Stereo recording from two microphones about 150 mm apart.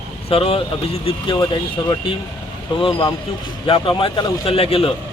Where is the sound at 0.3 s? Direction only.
40° left (ahead or behind).